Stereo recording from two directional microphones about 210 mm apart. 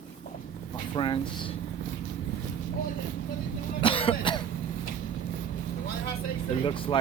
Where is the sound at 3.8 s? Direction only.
25° left (ahead or behind).